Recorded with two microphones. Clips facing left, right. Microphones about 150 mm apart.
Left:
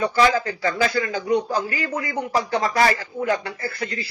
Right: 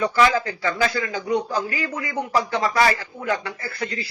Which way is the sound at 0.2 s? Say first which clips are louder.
Left 1 dB; 35° left (ahead or behind).